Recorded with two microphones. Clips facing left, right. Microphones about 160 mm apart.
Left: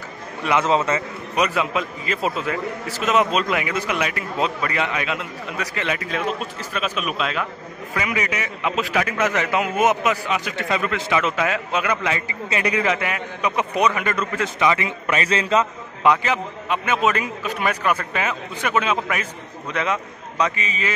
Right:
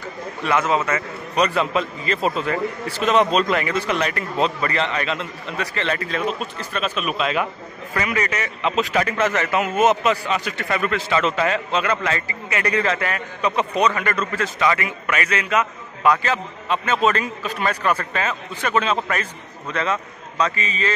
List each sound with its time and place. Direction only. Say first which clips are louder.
0.4 s a man's voice: left 1 dB; 20° left (ahead or behind)
1.3 s a man's voice: right 2 dB; 5° left (ahead or behind)